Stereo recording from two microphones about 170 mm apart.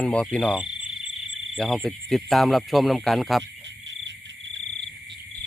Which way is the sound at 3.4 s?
90° right.